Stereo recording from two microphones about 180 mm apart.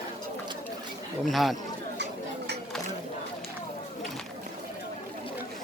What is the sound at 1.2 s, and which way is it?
Speech, centre (ahead or behind).